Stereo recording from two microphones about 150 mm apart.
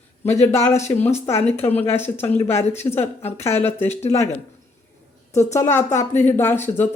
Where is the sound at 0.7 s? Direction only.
50° left (ahead or behind).